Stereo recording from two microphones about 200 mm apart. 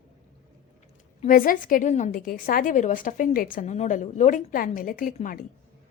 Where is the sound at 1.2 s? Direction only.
45° left (ahead or behind).